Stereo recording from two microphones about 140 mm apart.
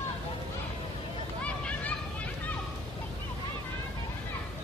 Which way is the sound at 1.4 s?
10° left (ahead or behind).